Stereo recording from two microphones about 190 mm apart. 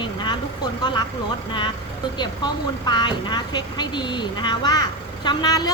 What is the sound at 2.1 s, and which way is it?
Speech, 25° left (ahead or behind).